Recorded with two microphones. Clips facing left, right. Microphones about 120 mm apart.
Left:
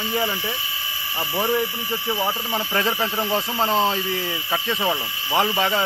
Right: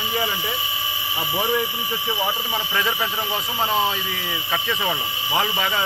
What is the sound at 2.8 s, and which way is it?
Speech, 30° left (ahead or behind).